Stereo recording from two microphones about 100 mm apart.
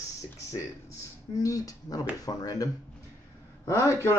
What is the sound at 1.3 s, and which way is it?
A man's voice, 35° left (ahead or behind).